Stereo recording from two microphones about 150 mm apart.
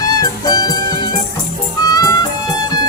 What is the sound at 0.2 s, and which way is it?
Music, 25° left (ahead or behind).